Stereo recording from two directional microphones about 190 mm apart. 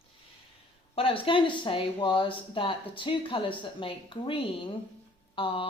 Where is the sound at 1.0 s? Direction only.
30° left (ahead or behind).